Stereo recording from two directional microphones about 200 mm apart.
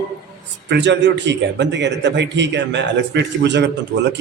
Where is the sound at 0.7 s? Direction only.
60° right (ahead or behind).